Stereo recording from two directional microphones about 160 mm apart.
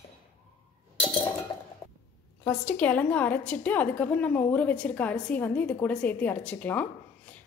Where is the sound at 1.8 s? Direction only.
20° left (ahead or behind).